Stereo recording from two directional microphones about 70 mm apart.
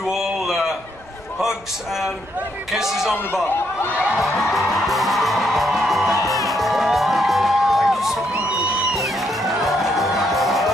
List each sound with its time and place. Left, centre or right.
0.0 s a sound: centre
2.7 s speech: centre
3.4 s speech: left
4.2 s music: centre
9.2 s music: centre